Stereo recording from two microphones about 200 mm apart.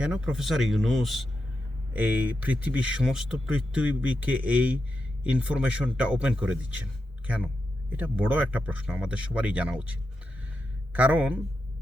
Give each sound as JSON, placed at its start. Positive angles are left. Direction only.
{"t": 0.0, "sound": "speech", "side_deg": -5}